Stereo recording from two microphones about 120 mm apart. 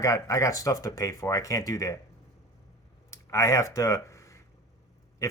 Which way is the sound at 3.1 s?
25° left (ahead or behind).